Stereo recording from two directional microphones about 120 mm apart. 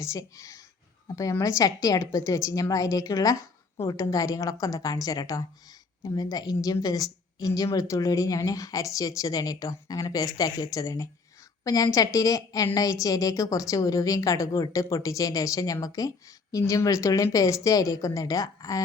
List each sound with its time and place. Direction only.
0.0 s a woman's voice: 25° left (ahead or behind)